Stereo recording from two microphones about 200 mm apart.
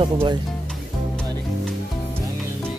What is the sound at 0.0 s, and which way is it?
Speech, 25° right (ahead or behind).